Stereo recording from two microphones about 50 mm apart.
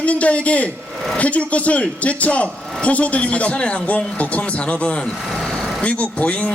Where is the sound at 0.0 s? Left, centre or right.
Left.